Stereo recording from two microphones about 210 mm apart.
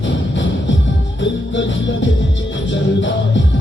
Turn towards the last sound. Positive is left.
turn(degrees=60)  # may be behind; listen again after turning